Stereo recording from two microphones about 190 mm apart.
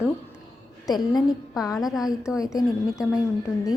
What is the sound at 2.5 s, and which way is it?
Speech, 15° left (ahead or behind).